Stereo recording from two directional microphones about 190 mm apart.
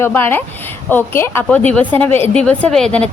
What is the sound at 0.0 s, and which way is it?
A woman's voice, 10° left (ahead or behind).